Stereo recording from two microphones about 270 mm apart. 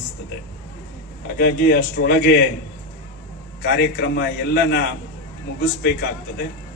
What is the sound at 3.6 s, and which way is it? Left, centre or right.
A man's voice, left.